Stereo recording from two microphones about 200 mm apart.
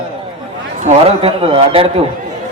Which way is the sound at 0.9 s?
30° right (ahead or behind).